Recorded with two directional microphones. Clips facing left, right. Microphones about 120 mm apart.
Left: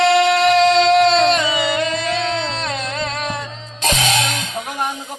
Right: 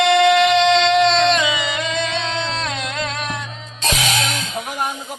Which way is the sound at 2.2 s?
30° left (ahead or behind).